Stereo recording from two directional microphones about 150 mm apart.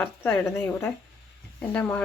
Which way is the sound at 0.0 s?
10° left (ahead or behind).